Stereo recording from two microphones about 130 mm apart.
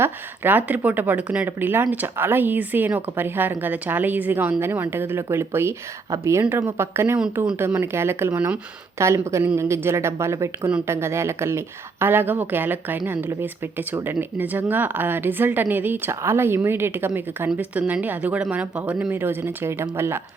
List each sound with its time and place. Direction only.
0.0 s a woman's voice: 15° right (ahead or behind)